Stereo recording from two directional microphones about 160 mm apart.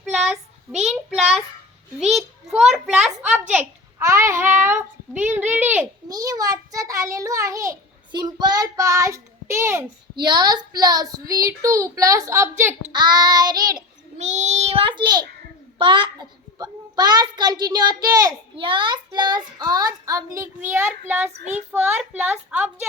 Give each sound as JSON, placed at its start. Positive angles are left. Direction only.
{"t": 0.0, "sound": "child singing", "side_deg": -5}
{"t": 2.0, "sound": "a child's voice", "side_deg": -5}
{"t": 6.1, "sound": "a child's voice", "side_deg": -20}
{"t": 12.9, "sound": "a child's voice", "side_deg": -25}
{"t": 14.2, "sound": "a child's voice", "side_deg": -45}
{"t": 21.7, "sound": "a woman's voice", "side_deg": -15}